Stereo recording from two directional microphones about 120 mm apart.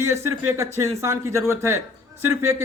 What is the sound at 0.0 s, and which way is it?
Speech, 20° right (ahead or behind).